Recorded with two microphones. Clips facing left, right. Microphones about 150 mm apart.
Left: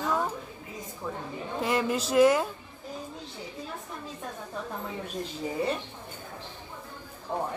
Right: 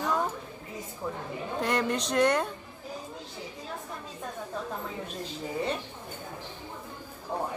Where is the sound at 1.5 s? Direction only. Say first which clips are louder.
Left 1 dB; 5° left (ahead or behind).